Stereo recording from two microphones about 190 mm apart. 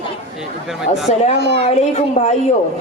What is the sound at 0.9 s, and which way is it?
Speech, 40° left (ahead or behind).